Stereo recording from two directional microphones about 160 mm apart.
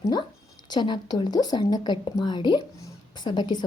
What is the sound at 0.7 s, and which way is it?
A woman's voice, 25° left (ahead or behind).